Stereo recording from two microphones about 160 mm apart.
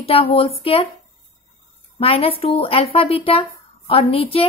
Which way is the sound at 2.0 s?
35° left (ahead or behind).